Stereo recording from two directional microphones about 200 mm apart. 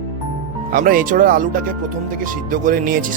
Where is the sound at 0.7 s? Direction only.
45° right (ahead or behind).